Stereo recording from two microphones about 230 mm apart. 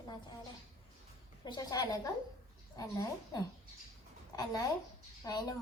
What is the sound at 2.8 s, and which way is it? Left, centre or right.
Speech, centre.